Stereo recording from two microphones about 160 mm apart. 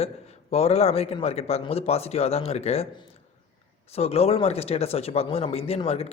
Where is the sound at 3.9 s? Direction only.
40° left (ahead or behind).